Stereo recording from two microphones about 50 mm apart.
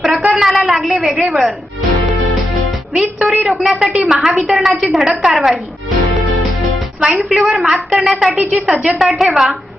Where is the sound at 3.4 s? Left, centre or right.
Centre.